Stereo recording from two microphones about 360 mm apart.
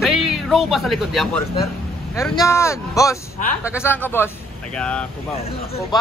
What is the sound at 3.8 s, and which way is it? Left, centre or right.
Speech, centre.